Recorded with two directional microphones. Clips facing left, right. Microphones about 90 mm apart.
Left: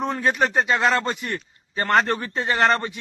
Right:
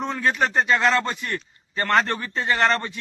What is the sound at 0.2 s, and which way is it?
A man's voice, 15° left (ahead or behind).